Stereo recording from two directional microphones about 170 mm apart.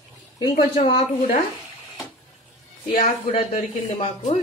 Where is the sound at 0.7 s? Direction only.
35° left (ahead or behind).